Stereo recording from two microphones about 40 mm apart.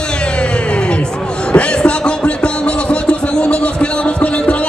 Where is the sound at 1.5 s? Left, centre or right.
Left.